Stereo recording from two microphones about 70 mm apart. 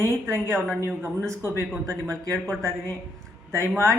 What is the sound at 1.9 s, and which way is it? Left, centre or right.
A man's voice, right.